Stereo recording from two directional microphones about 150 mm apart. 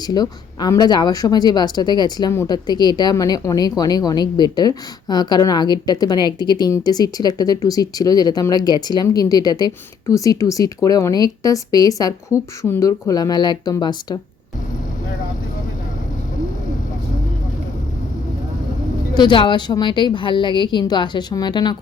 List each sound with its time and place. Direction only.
0.0 s a woman's voice: 25° left (ahead or behind)
19.1 s a woman's voice: 30° left (ahead or behind)